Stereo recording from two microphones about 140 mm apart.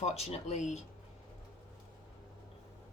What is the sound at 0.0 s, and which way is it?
Speech, 50° left (ahead or behind).